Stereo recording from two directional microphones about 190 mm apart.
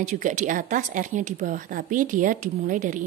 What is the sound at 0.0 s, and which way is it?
A woman's voice, 40° right (ahead or behind).